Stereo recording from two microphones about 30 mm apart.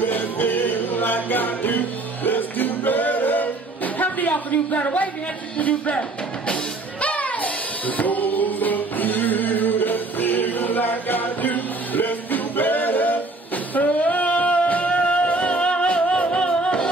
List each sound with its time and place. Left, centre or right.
0.0 s music: left
5.6 s speech: left
5.9 s music: left
13.7 s singing: left
16.2 s music: left